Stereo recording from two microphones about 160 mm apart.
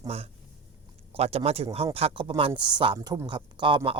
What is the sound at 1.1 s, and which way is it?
Speech, 40° right (ahead or behind).